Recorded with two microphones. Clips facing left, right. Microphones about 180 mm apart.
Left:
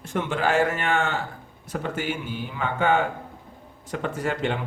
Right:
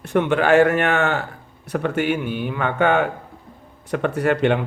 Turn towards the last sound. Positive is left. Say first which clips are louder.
# right 8 dB
turn(degrees=-65)  # may be behind; listen again after turning